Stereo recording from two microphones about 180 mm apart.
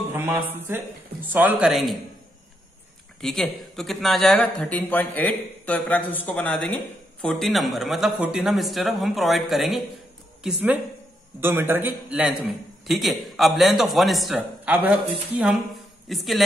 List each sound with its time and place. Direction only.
0.1 s music: 10° right (ahead or behind)
1.2 s speech: 10° right (ahead or behind)
3.2 s speech: centre (ahead or behind)